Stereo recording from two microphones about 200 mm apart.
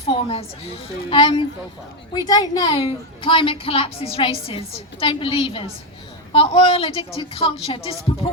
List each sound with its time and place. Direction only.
0.0 s a woman's voice: 30° left (ahead or behind)